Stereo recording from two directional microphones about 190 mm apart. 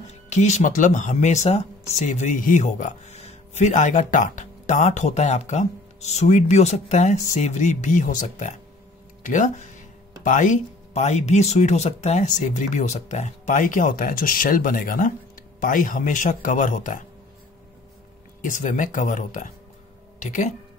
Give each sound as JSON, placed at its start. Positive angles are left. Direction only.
{"t": 0.3, "sound": "speech", "side_deg": 35}
{"t": 18.4, "sound": "speech", "side_deg": 40}